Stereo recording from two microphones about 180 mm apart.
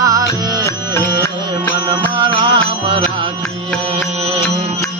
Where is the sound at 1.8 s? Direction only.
25° right (ahead or behind).